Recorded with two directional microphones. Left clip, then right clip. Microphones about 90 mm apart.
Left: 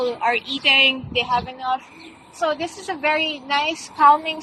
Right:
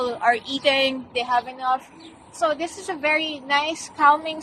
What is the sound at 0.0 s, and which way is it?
Speech, 20° right (ahead or behind).